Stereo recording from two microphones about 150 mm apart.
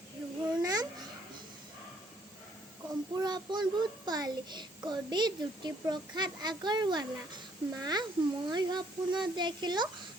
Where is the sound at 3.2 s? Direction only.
30° right (ahead or behind).